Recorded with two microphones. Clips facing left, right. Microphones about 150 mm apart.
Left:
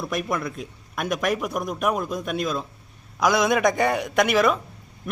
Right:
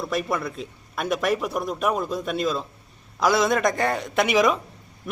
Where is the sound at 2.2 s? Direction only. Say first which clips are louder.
Right 1 dB; centre (ahead or behind).